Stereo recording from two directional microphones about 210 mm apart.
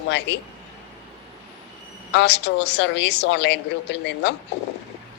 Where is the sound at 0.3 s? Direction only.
55° left (ahead or behind).